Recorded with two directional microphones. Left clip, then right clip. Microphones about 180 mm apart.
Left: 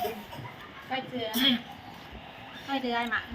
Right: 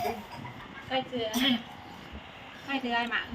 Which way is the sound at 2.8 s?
10° right (ahead or behind).